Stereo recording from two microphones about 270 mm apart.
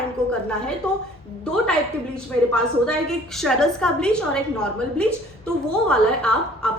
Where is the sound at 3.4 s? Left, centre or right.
Centre.